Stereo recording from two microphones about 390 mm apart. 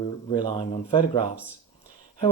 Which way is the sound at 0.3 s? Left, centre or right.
Centre.